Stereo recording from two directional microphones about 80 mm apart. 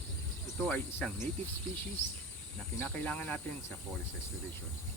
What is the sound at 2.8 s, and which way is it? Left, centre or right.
Cricket, centre.